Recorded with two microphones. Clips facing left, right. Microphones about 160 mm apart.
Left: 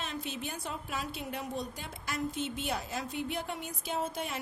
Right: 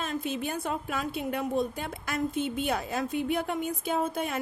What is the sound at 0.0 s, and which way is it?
A woman's voice, 50° right (ahead or behind).